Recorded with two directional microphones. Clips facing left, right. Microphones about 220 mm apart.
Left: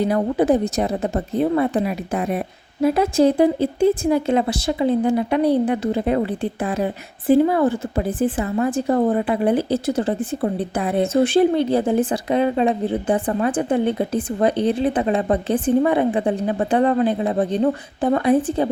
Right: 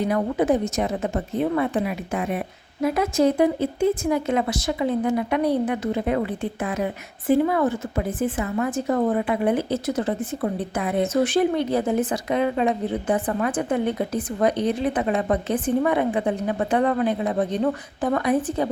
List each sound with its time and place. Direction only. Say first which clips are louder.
0.0 s a woman's voice: left 3 dB; 35° left (ahead or behind)